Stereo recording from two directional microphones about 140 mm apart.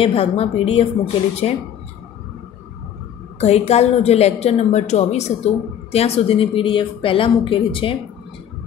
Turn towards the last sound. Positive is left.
turn(degrees=40)  # may be behind; listen again after turning